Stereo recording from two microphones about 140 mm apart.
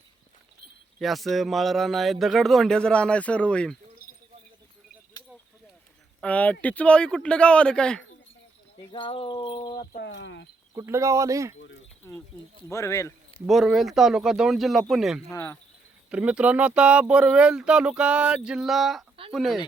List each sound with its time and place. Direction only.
0.9 s speech: centre (ahead or behind)
4.0 s a sound: 90° left
6.2 s speech: 10° left (ahead or behind)
8.9 s a sound: 35° left (ahead or behind)
10.8 s speech: 20° right (ahead or behind)
12.0 s speech: 20° left (ahead or behind)
13.5 s speech: centre (ahead or behind)
15.3 s speech: 20° left (ahead or behind)
16.0 s speech: 10° right (ahead or behind)